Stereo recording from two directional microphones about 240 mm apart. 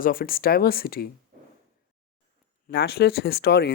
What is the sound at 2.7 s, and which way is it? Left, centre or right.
Speech, left.